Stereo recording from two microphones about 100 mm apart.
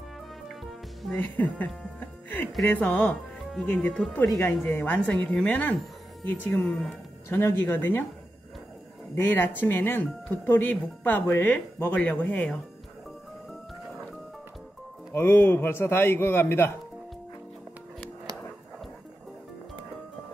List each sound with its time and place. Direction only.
1.1 s speech: 15° left (ahead or behind)
6.6 s a woman's voice: 5° left (ahead or behind)
7.2 s speech: 25° left (ahead or behind)
9.1 s speech: 20° left (ahead or behind)
15.1 s speech: 20° left (ahead or behind)